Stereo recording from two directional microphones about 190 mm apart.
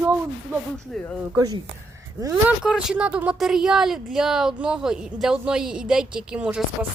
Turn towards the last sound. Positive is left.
turn(degrees=-5)  # may be behind; listen again after turning